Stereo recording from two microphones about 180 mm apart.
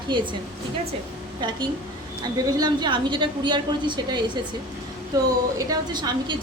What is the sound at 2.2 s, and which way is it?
A woman's voice, 25° right (ahead or behind).